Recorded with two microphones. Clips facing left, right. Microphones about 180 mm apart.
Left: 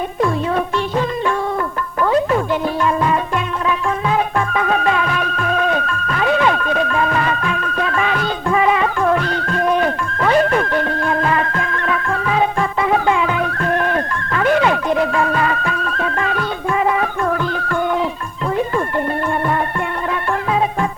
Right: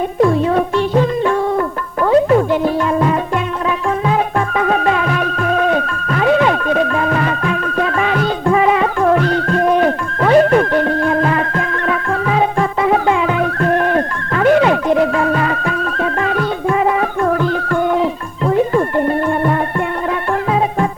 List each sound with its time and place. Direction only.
0.2 s music: 35° right (ahead or behind)
4.4 s music: 40° right (ahead or behind)